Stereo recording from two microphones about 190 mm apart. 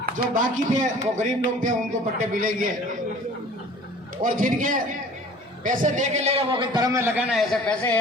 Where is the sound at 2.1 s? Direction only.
45° right (ahead or behind).